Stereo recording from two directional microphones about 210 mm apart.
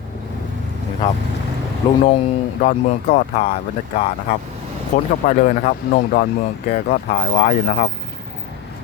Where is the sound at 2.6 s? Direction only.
40° left (ahead or behind).